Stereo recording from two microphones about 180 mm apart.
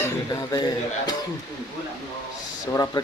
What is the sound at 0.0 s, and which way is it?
Speech, 20° left (ahead or behind).